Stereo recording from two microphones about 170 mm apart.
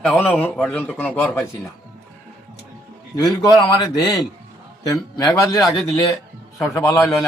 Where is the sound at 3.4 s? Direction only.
25° left (ahead or behind).